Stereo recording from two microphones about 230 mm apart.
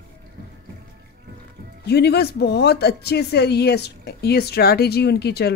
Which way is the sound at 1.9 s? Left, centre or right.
Left.